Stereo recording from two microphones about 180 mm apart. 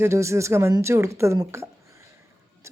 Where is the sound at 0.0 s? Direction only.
15° right (ahead or behind).